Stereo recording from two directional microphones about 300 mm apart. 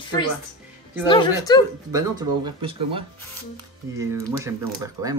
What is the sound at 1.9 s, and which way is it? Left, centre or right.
Speech, centre.